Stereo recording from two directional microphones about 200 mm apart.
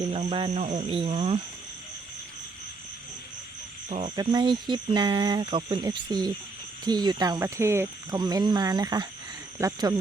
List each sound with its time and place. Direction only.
0.0 s speech: 30° right (ahead or behind)
3.8 s speech: 35° right (ahead or behind)
4.1 s speech: 20° right (ahead or behind)